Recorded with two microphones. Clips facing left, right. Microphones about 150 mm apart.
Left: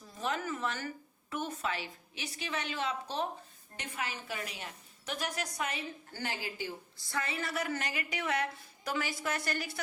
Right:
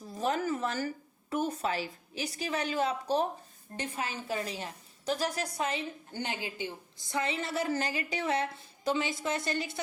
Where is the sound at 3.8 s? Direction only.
30° right (ahead or behind).